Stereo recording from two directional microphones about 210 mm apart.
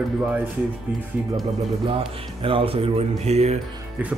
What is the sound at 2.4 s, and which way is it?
Speech, 25° right (ahead or behind).